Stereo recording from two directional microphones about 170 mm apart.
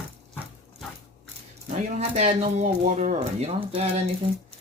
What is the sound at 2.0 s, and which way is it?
Speech, 40° right (ahead or behind).